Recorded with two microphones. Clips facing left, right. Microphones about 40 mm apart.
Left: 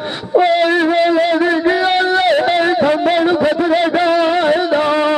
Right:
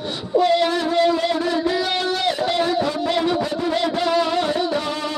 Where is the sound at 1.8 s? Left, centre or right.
Left.